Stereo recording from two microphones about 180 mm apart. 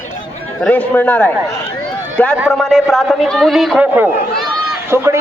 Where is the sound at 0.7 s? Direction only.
10° left (ahead or behind).